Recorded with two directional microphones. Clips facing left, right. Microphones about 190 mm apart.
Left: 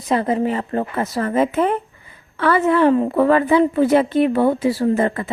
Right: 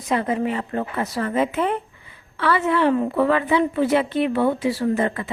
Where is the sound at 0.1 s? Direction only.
35° left (ahead or behind).